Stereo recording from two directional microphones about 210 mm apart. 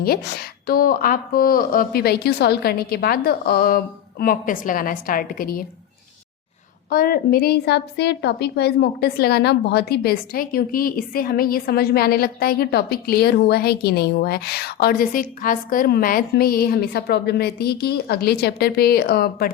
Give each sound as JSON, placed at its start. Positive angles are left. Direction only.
{"t": 0.0, "sound": "a woman's voice", "side_deg": 50}
{"t": 6.9, "sound": "a woman's voice", "side_deg": 45}